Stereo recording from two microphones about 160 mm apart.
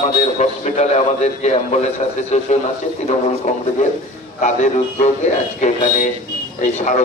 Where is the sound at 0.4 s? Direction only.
45° left (ahead or behind).